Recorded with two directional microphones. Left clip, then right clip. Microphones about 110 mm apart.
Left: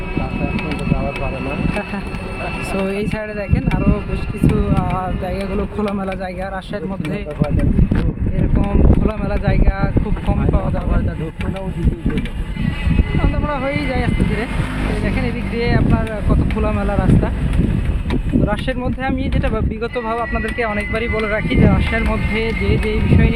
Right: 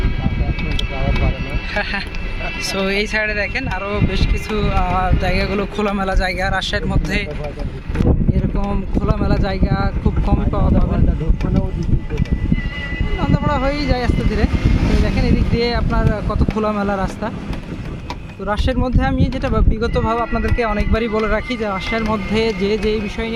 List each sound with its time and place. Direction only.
2.7 s speech: centre (ahead or behind)
4.7 s speech: 15° right (ahead or behind)
9.0 s speech: 45° right (ahead or behind)
13.3 s speech: 55° right (ahead or behind)
18.4 s speech: 50° right (ahead or behind)
22.4 s speech: 70° right (ahead or behind)